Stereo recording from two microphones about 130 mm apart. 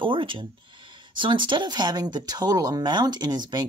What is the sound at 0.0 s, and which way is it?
Speech, 40° right (ahead or behind).